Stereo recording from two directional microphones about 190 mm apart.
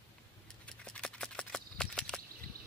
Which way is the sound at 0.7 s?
5° left (ahead or behind).